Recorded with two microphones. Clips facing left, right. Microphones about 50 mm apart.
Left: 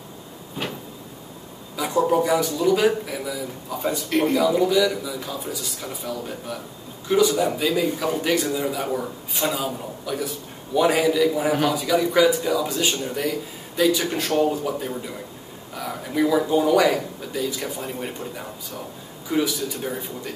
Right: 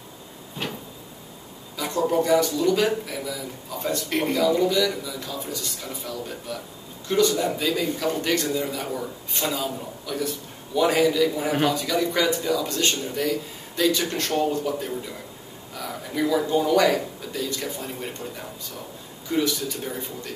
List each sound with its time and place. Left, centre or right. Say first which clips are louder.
0.6 s vehicle: left 2 dB; centre
1.8 s a man's voice: left 3 dB; centre
19.3 s speech: left 1 dB; centre